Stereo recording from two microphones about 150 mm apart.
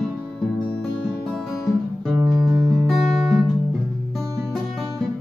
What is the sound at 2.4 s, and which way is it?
Music, centre (ahead or behind).